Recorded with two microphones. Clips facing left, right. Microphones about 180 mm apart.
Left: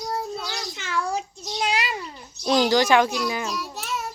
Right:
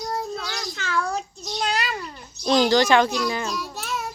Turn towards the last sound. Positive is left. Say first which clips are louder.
# right 1 dB
turn(degrees=0)  # may be behind; listen again after turning